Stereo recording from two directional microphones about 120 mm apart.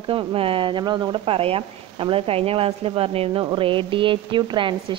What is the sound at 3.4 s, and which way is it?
Speech, 45° right (ahead or behind).